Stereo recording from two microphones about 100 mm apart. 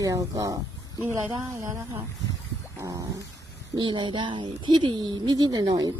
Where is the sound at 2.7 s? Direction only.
35° right (ahead or behind).